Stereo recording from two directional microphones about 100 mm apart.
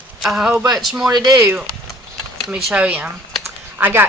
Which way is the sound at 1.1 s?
45° right (ahead or behind).